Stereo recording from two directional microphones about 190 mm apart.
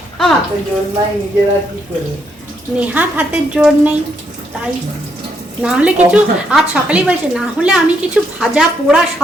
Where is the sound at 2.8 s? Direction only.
10° right (ahead or behind).